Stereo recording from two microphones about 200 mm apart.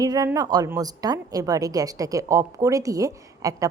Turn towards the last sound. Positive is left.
turn(degrees=-15)  # may be behind; listen again after turning